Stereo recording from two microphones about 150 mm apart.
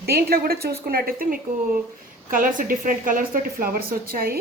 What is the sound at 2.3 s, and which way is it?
A woman's voice, 65° right (ahead or behind).